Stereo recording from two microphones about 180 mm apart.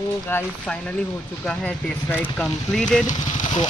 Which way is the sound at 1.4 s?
5° left (ahead or behind).